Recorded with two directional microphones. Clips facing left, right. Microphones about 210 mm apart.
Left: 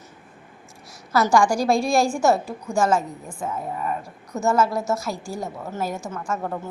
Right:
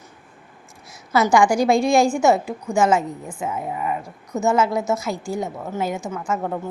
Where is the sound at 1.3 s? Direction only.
Centre (ahead or behind).